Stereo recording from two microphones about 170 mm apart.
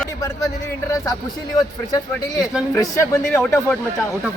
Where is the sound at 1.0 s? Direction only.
20° left (ahead or behind).